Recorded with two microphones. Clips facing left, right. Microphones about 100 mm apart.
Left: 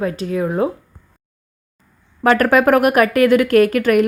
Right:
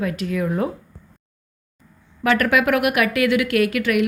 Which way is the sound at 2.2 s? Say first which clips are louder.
Left 5 dB; 40° left (ahead or behind).